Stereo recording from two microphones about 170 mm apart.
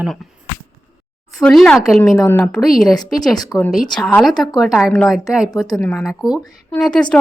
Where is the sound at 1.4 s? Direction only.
5° left (ahead or behind).